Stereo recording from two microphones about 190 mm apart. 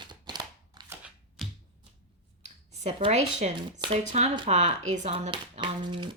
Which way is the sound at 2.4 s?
35° right (ahead or behind).